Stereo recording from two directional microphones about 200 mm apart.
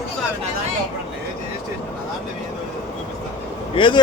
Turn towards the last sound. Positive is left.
turn(degrees=25)  # may be behind; listen again after turning